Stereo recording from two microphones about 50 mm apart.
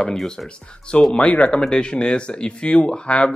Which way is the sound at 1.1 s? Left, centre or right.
Left.